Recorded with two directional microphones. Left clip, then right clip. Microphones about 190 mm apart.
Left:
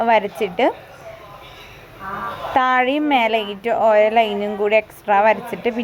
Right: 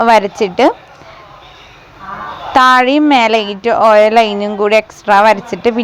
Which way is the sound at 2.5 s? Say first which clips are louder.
Right 9 dB; 20° right (ahead or behind).